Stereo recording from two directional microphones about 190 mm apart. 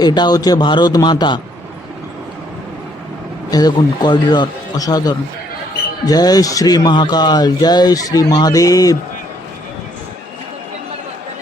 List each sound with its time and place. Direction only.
0.0 s speech: 20° left (ahead or behind)
3.5 s speech: 20° left (ahead or behind)